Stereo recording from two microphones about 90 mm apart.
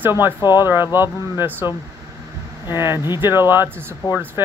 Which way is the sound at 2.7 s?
25° right (ahead or behind).